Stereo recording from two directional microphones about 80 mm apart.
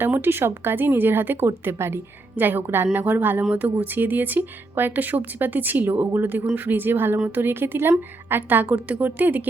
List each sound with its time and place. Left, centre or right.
0.0 s speech: right